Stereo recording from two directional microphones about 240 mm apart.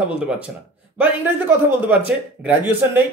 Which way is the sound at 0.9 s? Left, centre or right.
Centre.